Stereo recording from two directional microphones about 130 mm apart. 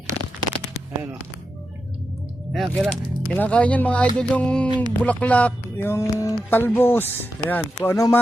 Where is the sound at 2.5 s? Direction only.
Centre (ahead or behind).